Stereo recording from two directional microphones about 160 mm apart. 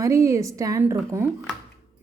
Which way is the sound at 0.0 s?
20° right (ahead or behind).